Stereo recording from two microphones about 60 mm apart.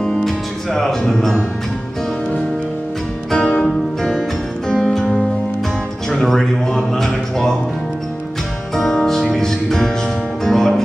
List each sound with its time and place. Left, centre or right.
0.0 s music: centre
3.3 s music: centre
8.7 s music: centre